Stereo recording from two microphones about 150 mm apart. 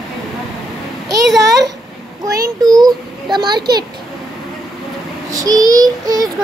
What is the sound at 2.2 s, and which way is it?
Child singing, 25° right (ahead or behind).